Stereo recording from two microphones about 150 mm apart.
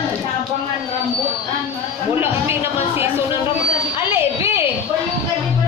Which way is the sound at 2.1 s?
15° right (ahead or behind).